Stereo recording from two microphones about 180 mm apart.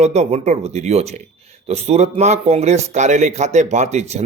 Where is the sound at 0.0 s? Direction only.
35° right (ahead or behind).